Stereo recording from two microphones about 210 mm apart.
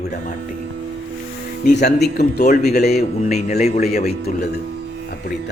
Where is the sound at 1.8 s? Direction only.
50° left (ahead or behind).